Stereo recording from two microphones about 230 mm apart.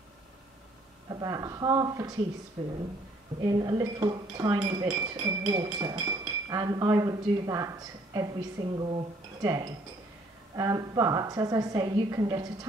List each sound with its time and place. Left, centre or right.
1.2 s speech: centre
3.3 s speech: centre